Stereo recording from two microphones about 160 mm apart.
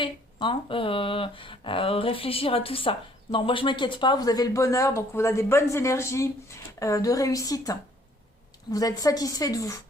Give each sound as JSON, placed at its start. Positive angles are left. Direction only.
{"t": 0.0, "sound": "speech", "side_deg": 30}